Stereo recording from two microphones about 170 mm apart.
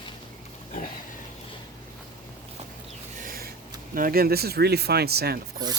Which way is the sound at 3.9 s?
60° right (ahead or behind).